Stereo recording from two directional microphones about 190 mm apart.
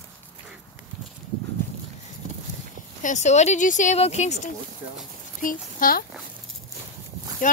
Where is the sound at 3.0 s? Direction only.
40° left (ahead or behind).